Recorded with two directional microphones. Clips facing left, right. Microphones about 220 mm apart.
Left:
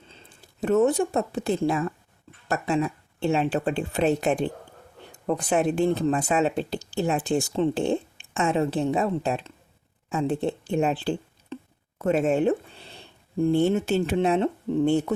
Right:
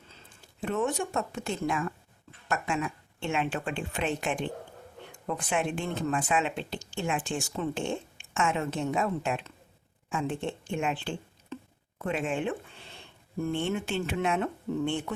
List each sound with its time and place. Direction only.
0.1 s speech: 35° left (ahead or behind)